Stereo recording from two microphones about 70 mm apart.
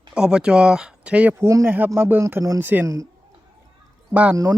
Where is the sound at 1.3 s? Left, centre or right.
Right.